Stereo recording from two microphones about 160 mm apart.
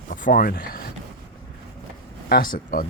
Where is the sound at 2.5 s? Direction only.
60° left (ahead or behind).